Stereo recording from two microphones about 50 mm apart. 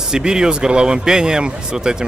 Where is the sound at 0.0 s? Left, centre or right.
Centre.